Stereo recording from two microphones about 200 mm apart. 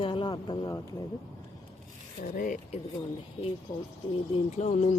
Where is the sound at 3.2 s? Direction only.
30° left (ahead or behind).